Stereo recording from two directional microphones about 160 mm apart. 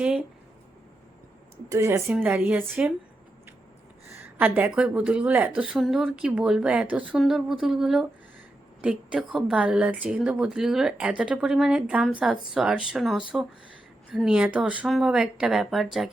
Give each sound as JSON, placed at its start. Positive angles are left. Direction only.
{"t": 1.7, "sound": "speech", "side_deg": -15}
{"t": 4.2, "sound": "a woman's voice", "side_deg": -10}